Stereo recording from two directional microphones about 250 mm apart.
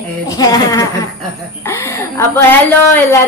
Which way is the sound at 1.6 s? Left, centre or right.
Centre.